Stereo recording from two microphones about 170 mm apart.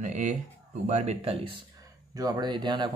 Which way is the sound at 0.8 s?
40° right (ahead or behind).